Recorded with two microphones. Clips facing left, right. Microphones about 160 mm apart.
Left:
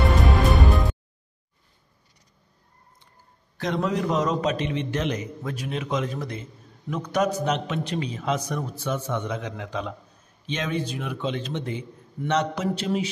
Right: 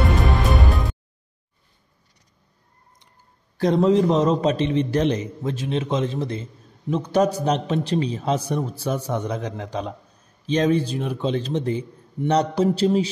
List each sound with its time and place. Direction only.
0.2 s music: centre (ahead or behind)
3.5 s a man's voice: 30° right (ahead or behind)